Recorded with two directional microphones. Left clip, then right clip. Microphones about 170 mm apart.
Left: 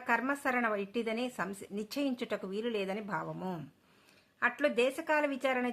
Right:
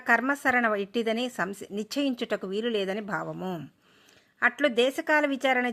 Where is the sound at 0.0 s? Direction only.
40° right (ahead or behind).